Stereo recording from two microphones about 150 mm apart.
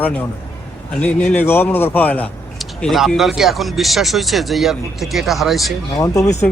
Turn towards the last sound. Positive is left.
turn(degrees=20)  # may be behind; listen again after turning